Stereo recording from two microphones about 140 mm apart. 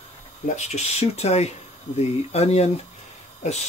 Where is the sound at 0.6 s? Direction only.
55° left (ahead or behind).